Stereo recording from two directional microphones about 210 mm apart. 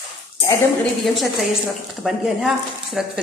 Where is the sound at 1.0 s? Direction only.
Centre (ahead or behind).